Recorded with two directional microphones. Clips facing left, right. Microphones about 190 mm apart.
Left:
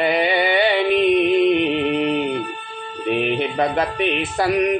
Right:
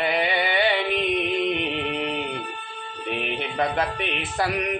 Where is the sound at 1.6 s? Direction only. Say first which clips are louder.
Left 8 dB; 90° left.